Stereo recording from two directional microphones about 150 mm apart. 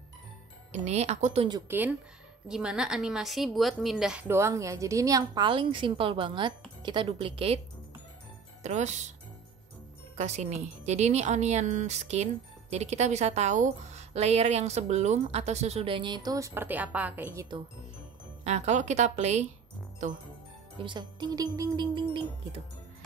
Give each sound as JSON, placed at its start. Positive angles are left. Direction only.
{"t": 0.7, "sound": "speech", "side_deg": -50}
{"t": 1.7, "sound": "a woman's voice", "side_deg": -10}
{"t": 4.3, "sound": "a woman's voice", "side_deg": -20}
{"t": 8.6, "sound": "speech", "side_deg": -50}
{"t": 10.1, "sound": "speech", "side_deg": -50}
{"t": 18.4, "sound": "speech", "side_deg": -50}
{"t": 20.7, "sound": "a woman's voice", "side_deg": -30}